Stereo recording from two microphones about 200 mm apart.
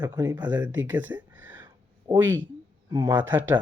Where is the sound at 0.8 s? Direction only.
10° right (ahead or behind).